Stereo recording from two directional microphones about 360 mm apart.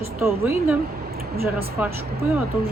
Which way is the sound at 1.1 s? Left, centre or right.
Right.